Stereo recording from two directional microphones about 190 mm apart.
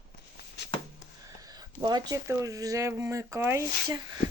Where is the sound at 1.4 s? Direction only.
20° right (ahead or behind).